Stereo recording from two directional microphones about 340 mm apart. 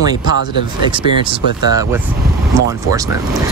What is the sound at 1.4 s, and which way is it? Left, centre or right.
Speech, left.